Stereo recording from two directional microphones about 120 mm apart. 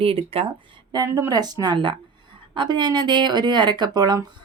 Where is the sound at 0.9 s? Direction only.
30° right (ahead or behind).